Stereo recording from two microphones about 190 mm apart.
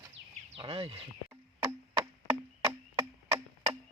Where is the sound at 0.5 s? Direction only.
30° right (ahead or behind).